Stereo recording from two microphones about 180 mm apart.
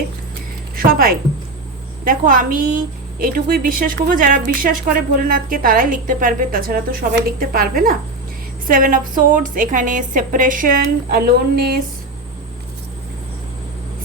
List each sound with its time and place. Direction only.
0.8 s a woman's voice: 55° right (ahead or behind)
11.1 s speech: 60° right (ahead or behind)